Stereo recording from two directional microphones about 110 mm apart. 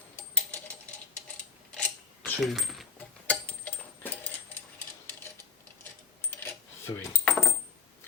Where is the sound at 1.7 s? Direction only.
10° left (ahead or behind).